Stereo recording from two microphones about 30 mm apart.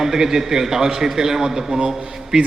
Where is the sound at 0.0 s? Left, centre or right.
Centre.